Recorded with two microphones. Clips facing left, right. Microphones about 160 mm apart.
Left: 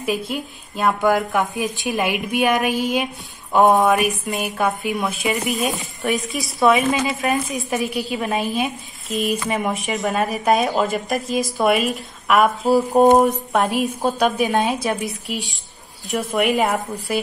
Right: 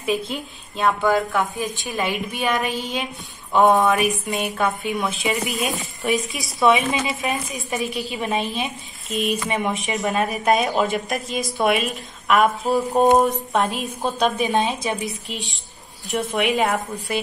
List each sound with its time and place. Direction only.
0.3 s speech: 5° left (ahead or behind)
1.0 s a woman's voice: 15° left (ahead or behind)